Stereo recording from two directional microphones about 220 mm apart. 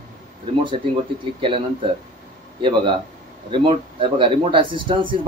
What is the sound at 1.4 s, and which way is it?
Speech, 25° right (ahead or behind).